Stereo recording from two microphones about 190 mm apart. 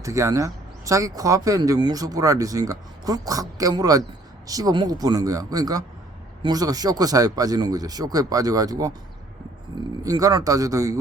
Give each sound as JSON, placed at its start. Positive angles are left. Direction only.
{"t": 0.0, "sound": "speech", "side_deg": -15}
{"t": 10.0, "sound": "speech", "side_deg": -20}